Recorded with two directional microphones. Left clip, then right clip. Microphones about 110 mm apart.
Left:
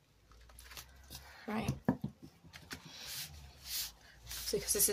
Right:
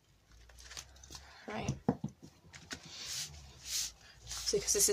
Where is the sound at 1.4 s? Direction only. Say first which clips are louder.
Left 1 dB; 10° left (ahead or behind).